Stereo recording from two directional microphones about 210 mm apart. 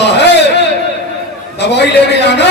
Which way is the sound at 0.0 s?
55° left (ahead or behind).